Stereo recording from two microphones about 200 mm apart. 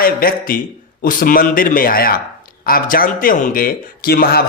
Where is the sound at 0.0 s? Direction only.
45° left (ahead or behind).